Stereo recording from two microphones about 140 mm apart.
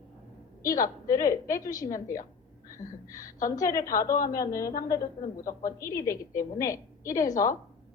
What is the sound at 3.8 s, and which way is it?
Speech, 85° left.